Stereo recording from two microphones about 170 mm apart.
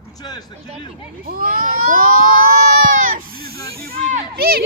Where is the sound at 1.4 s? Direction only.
55° right (ahead or behind).